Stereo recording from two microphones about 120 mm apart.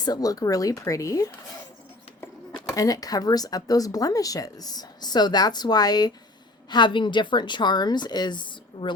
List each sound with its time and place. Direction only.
0.0 s speech: 30° left (ahead or behind)
2.7 s speech: 30° left (ahead or behind)